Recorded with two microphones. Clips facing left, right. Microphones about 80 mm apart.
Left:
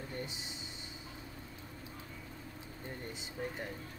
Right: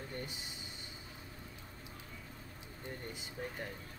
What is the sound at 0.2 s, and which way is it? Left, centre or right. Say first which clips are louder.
Speech: left 2 dB; centre.